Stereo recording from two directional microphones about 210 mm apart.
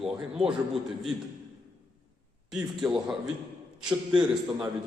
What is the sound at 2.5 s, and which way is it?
Speech, centre (ahead or behind).